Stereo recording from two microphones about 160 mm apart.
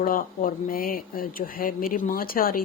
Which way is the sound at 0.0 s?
60° left (ahead or behind).